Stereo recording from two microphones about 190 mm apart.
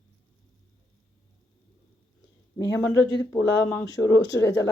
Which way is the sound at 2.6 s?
70° left (ahead or behind).